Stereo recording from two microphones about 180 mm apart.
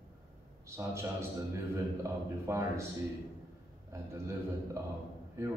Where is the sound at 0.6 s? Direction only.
15° right (ahead or behind).